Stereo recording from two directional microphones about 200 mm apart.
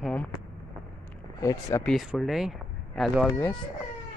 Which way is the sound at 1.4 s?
15° left (ahead or behind).